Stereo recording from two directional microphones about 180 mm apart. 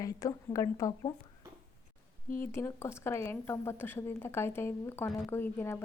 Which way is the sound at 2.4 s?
15° left (ahead or behind).